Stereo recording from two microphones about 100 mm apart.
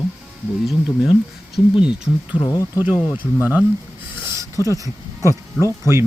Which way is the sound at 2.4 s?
35° left (ahead or behind).